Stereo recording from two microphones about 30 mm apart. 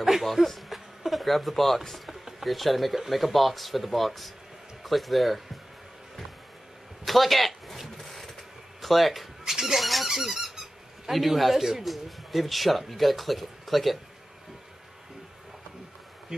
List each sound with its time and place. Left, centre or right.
0.2 s speech: centre
7.1 s a sound: centre
9.5 s squeak: centre
9.8 s speech: centre
10.1 s squeak: centre
11.1 s speech: centre
16.3 s bee: centre